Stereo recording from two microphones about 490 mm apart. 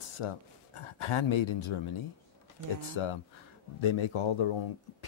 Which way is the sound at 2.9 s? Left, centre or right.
Left.